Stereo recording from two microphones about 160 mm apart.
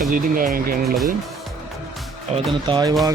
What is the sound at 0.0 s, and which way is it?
Speech, 60° right (ahead or behind).